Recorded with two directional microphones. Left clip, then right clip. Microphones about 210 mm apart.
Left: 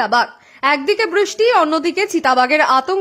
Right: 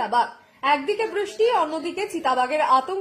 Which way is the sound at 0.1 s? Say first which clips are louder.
Left 6 dB; 40° left (ahead or behind).